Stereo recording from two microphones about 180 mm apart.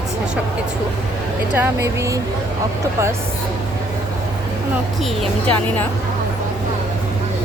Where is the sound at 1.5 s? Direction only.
15° right (ahead or behind).